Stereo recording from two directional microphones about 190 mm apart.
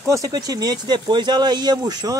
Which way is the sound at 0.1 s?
20° right (ahead or behind).